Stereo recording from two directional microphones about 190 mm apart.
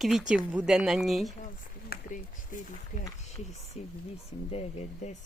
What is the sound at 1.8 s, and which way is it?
Speech, 45° left (ahead or behind).